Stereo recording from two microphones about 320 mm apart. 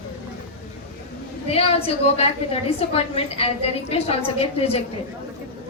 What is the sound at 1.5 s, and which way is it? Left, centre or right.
A woman's voice, centre.